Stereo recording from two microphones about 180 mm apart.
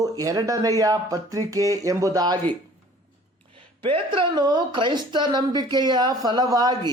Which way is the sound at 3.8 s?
30° right (ahead or behind).